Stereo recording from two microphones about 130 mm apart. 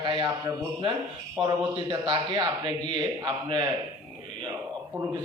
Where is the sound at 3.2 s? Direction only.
35° right (ahead or behind).